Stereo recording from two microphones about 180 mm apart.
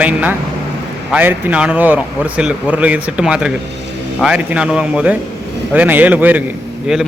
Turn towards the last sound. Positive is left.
turn(degrees=-5)  # may be behind; listen again after turning